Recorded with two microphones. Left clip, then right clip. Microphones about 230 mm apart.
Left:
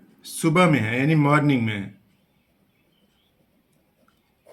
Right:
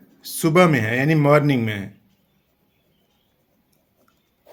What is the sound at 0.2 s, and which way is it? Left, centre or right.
Speech, right.